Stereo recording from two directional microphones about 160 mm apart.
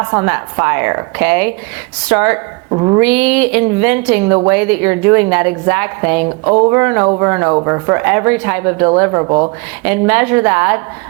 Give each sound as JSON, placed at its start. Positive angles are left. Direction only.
{"t": 0.0, "sound": "a woman's voice", "side_deg": -15}
{"t": 2.6, "sound": "a sound", "side_deg": -30}
{"t": 3.0, "sound": "a woman's voice", "side_deg": -10}